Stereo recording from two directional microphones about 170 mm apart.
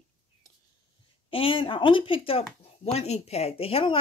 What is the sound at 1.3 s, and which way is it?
Speech, 30° left (ahead or behind).